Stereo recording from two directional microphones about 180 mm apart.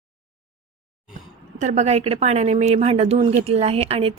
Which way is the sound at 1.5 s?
40° right (ahead or behind).